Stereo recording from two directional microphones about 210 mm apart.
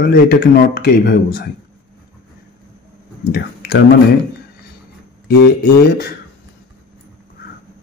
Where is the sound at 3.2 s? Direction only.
50° left (ahead or behind).